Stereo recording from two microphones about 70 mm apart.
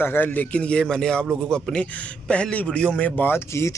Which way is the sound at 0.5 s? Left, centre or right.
Centre.